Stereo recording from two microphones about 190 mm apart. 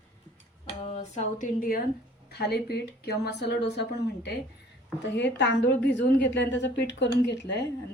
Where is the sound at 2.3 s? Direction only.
60° left (ahead or behind).